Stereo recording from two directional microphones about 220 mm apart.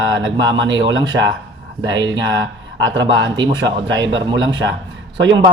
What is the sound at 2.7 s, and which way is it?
Speech, 55° right (ahead or behind).